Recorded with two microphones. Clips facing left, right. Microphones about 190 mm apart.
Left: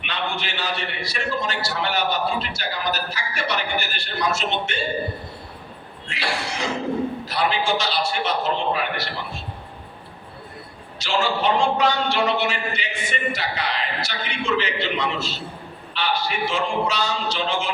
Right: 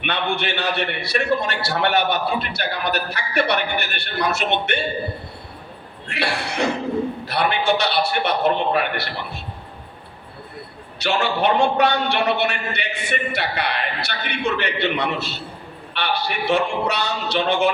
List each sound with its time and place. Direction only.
0.0 s a man's voice: 60° right (ahead or behind)
6.1 s a man's voice: 60° right (ahead or behind)
11.0 s a man's voice: 60° right (ahead or behind)